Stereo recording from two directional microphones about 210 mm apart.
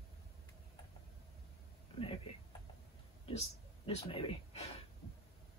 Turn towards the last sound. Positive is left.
turn(degrees=30)  # may be behind; listen again after turning